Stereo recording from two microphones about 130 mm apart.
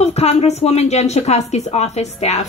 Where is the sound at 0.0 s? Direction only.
55° left (ahead or behind).